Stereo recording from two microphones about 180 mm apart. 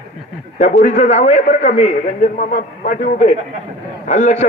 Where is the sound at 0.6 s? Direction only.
40° left (ahead or behind).